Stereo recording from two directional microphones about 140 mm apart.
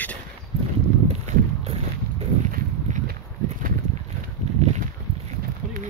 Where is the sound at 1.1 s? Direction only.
50° right (ahead or behind).